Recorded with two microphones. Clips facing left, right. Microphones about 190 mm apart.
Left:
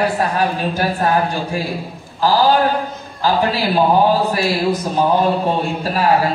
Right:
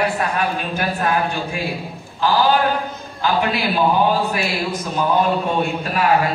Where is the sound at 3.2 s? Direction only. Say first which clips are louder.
Left 3 dB; 35° left (ahead or behind).